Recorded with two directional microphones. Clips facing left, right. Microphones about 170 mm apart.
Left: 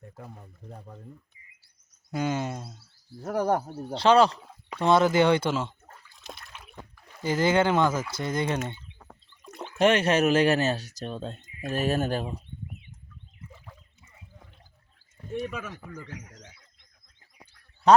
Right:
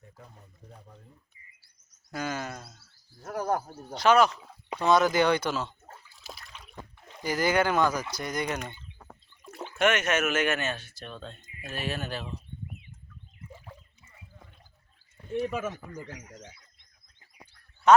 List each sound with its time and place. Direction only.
2.1 s speech: 20° left (ahead or behind)
6.2 s water: centre (ahead or behind)
6.9 s a sound: 20° right (ahead or behind)
7.3 s speech: 25° left (ahead or behind)
9.4 s a sound: 5° right (ahead or behind)
9.7 s speech: 30° left (ahead or behind); by 12.4 s 50° left (ahead or behind)
17.9 s speech: 35° left (ahead or behind)